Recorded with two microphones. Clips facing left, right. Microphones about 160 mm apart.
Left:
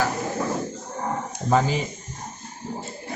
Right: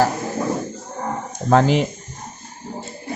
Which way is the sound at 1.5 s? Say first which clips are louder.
Right 6 dB; 80° right.